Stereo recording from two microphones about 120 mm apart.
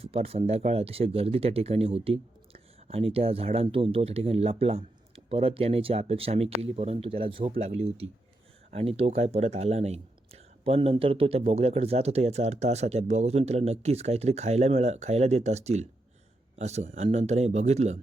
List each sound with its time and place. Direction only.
0.0 s speech: 55° right (ahead or behind)
7.6 s speech: 60° right (ahead or behind)